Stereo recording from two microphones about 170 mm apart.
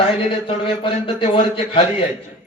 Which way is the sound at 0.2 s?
30° left (ahead or behind).